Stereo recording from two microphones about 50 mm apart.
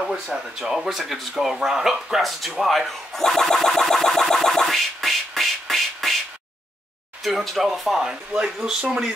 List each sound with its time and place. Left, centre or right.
0.1 s speech: centre
7.2 s speech: centre
8.1 s speech: centre